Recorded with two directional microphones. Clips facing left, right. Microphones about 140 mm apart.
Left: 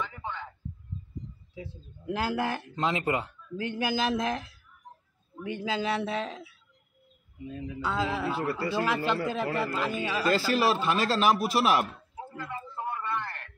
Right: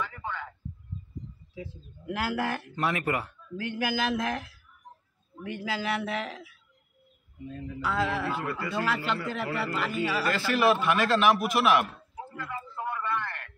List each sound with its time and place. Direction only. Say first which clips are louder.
0.0 s a sound: right 1 dB; 20° left (ahead or behind)
1.5 s speech: right 2 dB; 25° left (ahead or behind)
7.4 s speech: left 1 dB; 5° left (ahead or behind)
7.8 s speech: right 1 dB; 20° left (ahead or behind)
8.5 s a man's voice: left 2 dB; 30° left (ahead or behind)
8.8 s speech: left 2 dB; 20° left (ahead or behind)
10.2 s a man's voice: left 1 dB; 30° left (ahead or behind)
12.4 s a sound: even; 30° left (ahead or behind)